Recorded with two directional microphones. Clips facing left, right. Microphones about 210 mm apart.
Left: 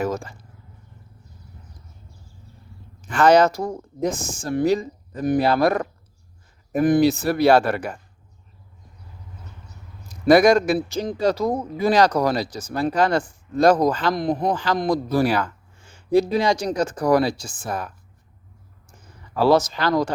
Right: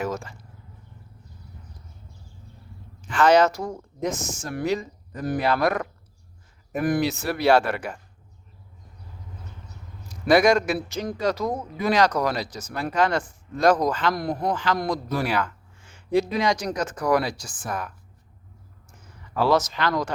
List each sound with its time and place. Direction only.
0.0 s speech: 35° left (ahead or behind)
3.1 s speech: 40° left (ahead or behind)
10.2 s speech: 40° left (ahead or behind)
14.1 s a man's voice: 20° left (ahead or behind)
14.5 s speech: 35° left (ahead or behind)
19.5 s speech: 30° left (ahead or behind)